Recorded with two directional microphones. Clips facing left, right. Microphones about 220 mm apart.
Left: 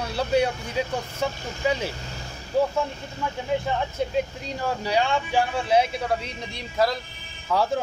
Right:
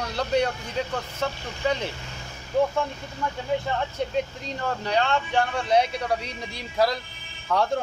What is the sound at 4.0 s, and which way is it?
A man's voice, 5° left (ahead or behind).